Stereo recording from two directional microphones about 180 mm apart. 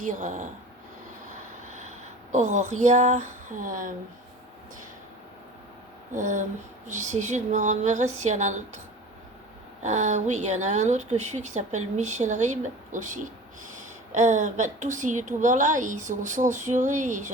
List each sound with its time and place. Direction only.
0.0 s a woman's voice: 45° right (ahead or behind)
2.3 s a woman's voice: 40° right (ahead or behind)
6.1 s a woman's voice: 45° right (ahead or behind)
9.8 s a woman's voice: 40° right (ahead or behind)